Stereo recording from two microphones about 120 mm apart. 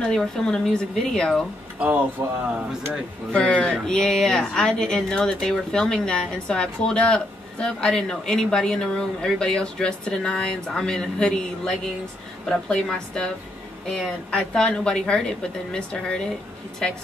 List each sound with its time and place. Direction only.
0.0 s speech: 5° left (ahead or behind)
2.2 s speech: 20° right (ahead or behind)
3.3 s a woman's voice: 10° left (ahead or behind)